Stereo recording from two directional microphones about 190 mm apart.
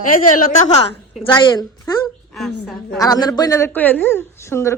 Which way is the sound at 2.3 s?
Centre (ahead or behind).